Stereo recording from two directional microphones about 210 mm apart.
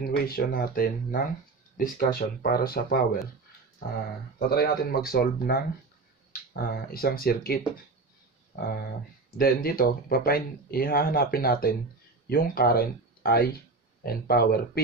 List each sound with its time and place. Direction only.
0.0 s speech: 45° left (ahead or behind)
4.6 s speech: 45° left (ahead or behind)